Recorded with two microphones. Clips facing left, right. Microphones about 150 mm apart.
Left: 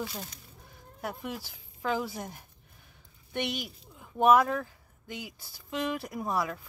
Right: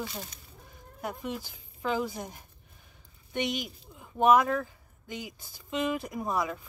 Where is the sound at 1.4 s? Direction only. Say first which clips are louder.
Right 1 dB; 15° right (ahead or behind).